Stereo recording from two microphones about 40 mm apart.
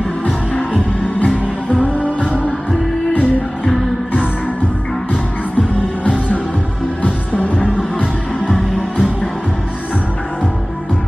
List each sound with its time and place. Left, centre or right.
0.7 s music: left
5.6 s music: left